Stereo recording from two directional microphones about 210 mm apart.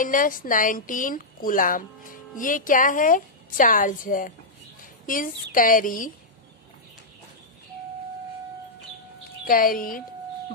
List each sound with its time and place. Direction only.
0.0 s a woman's voice: 40° left (ahead or behind)
9.4 s a woman's voice: 40° left (ahead or behind)